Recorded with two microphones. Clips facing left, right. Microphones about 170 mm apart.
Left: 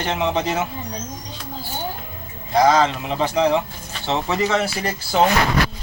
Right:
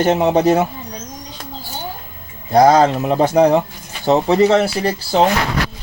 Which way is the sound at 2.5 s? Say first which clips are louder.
Right 5 dB; 40° right (ahead or behind).